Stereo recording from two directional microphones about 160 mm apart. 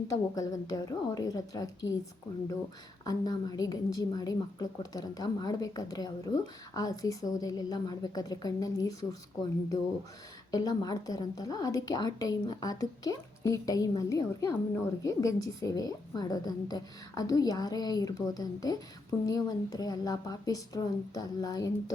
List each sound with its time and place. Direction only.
0.1 s a woman's voice: 20° left (ahead or behind)
3.0 s a woman's voice: 25° left (ahead or behind)